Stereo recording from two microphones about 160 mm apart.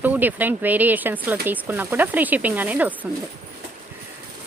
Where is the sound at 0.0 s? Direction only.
10° right (ahead or behind).